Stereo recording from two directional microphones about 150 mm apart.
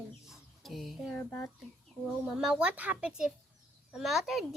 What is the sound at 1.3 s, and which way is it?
Speech, 15° left (ahead or behind).